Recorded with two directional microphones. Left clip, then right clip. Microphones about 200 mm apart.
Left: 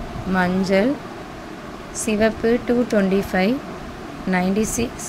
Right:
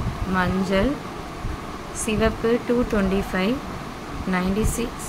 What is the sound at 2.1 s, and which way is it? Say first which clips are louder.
Speech: left 3 dB; 20° left (ahead or behind).